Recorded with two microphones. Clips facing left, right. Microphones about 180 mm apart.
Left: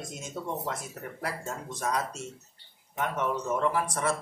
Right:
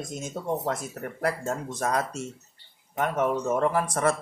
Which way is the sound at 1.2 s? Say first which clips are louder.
Right 8 dB; 50° right (ahead or behind).